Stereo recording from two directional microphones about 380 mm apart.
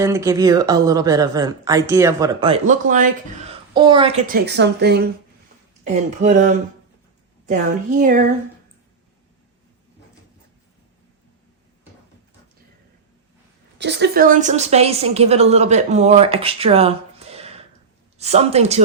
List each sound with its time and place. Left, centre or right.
0.0 s a woman's voice: centre
13.7 s a woman's voice: right